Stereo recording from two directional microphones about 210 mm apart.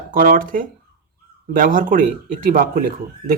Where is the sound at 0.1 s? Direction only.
40° right (ahead or behind).